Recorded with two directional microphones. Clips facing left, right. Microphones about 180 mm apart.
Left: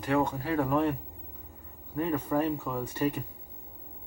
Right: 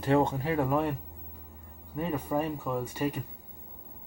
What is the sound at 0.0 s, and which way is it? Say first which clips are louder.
Speech: right 2 dB; 25° right (ahead or behind).